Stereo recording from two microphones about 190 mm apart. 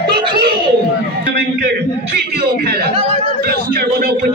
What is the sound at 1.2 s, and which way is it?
A man's voice, 60° right (ahead or behind).